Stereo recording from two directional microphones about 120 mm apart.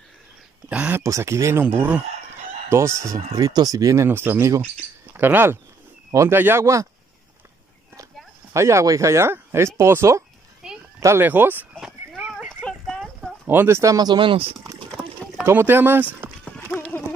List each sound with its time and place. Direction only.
0.7 s speech: 10° right (ahead or behind)
1.0 s speech: 25° right (ahead or behind)
3.0 s speech: 25° right (ahead or behind)
8.5 s speech: 25° right (ahead or behind)
12.2 s clip-clop: 10° right (ahead or behind)
12.6 s a sound: 5° left (ahead or behind)
13.5 s speech: 20° right (ahead or behind); by 14.5 s 45° right (ahead or behind)
15.4 s speech: 20° right (ahead or behind)
16.4 s clip-clop: 10° left (ahead or behind)